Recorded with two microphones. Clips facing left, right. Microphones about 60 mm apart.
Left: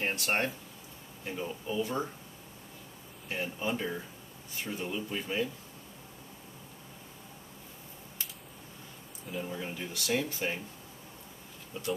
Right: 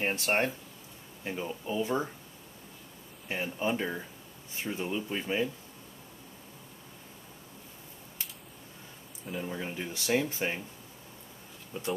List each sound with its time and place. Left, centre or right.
0.0 s speech: right
1.2 s speech: centre
1.7 s speech: right
3.3 s speech: right
9.3 s speech: centre